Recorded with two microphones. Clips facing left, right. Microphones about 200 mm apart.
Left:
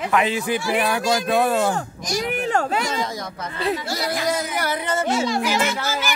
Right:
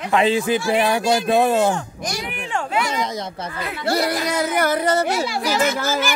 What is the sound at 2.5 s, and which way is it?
Speech, 40° left (ahead or behind).